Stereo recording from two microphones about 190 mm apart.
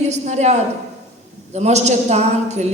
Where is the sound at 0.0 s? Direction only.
35° right (ahead or behind).